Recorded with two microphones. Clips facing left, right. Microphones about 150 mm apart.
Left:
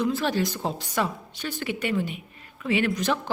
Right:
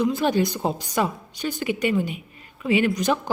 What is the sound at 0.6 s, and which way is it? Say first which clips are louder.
A woman's voice: right 3 dB; 5° right (ahead or behind).